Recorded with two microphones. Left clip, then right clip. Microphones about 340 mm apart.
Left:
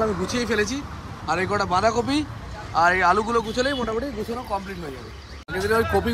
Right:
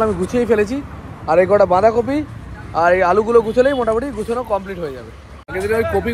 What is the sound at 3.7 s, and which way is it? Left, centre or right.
Speech, right.